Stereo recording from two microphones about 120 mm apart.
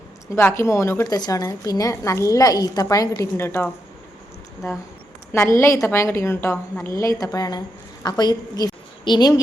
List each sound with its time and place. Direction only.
0.3 s a woman's voice: 20° left (ahead or behind)
1.0 s a woman's voice: 35° left (ahead or behind)
5.3 s a woman's voice: 20° left (ahead or behind)